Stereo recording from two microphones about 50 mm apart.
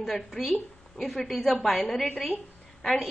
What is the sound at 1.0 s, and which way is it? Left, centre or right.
Speech, centre.